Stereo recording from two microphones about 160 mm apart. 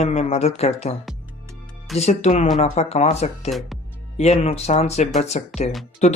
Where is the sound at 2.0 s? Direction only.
45° left (ahead or behind).